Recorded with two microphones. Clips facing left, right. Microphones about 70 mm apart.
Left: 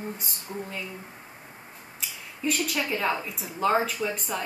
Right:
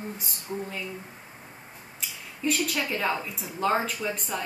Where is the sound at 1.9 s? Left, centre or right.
Centre.